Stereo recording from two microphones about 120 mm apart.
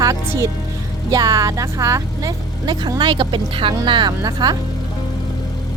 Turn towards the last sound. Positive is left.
turn(degrees=-35)  # may be behind; listen again after turning